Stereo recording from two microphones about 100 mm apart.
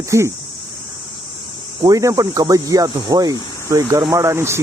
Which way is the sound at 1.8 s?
35° right (ahead or behind).